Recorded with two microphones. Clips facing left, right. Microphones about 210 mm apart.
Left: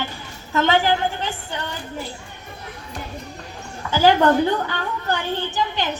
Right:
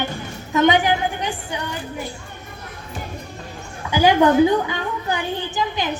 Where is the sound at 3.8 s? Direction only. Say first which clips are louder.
Right 1 dB; 15° right (ahead or behind).